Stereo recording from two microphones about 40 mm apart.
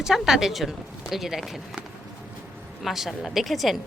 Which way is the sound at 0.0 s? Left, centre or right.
Centre.